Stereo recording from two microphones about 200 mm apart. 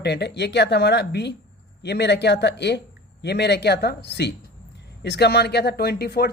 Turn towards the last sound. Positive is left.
turn(degrees=50)  # may be behind; listen again after turning